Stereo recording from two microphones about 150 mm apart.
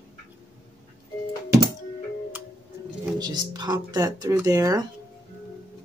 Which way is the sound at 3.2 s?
25° right (ahead or behind).